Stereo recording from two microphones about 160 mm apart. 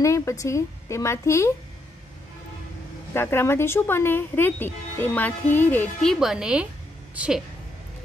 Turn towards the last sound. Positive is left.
turn(degrees=-10)  # may be behind; listen again after turning